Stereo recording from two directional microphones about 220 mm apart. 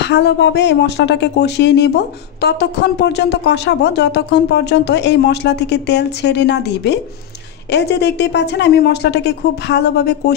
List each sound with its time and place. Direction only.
0.0 s a woman's voice: 50° left (ahead or behind)